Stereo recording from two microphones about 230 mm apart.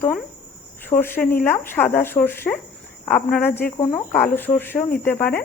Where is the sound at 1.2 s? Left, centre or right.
Left.